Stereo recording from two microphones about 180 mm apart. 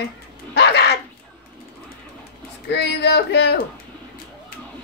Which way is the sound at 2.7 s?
65° left (ahead or behind).